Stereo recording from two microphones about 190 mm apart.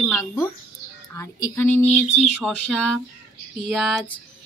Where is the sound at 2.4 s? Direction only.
Centre (ahead or behind).